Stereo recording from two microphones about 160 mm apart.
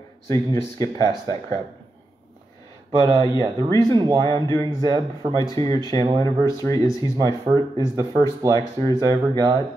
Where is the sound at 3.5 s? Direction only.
25° right (ahead or behind).